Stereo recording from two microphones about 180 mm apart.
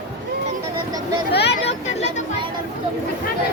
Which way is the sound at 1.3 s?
65° left (ahead or behind).